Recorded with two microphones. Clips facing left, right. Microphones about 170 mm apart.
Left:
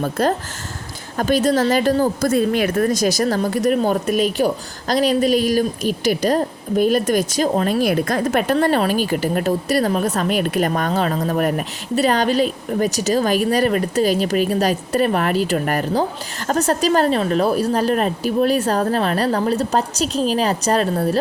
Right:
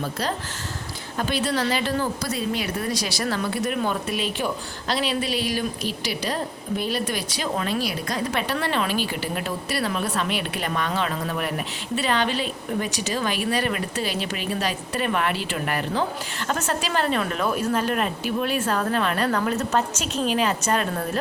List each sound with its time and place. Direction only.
0.0 s speech: 50° left (ahead or behind); by 21.2 s 35° left (ahead or behind)